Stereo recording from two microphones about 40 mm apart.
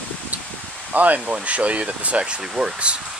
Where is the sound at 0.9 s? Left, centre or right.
Right.